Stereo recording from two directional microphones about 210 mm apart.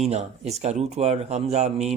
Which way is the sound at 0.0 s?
30° right (ahead or behind).